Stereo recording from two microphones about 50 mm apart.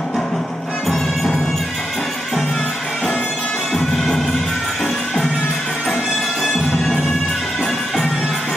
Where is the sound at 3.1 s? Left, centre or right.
Left.